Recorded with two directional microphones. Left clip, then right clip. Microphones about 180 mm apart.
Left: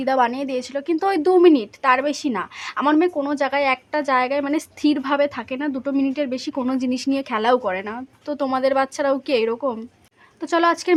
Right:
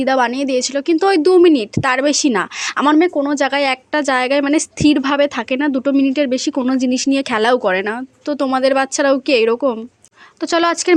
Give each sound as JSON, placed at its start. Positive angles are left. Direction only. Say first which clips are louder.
{"t": 0.0, "sound": "speech", "louder": "right 4 dB", "side_deg": -20}
{"t": 8.4, "sound": "speech", "louder": "right 4 dB", "side_deg": -20}